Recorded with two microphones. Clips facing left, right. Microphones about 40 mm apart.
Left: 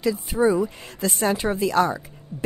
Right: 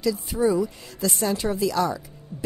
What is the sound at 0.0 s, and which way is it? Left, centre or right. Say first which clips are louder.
A woman's voice: left 2 dB; left.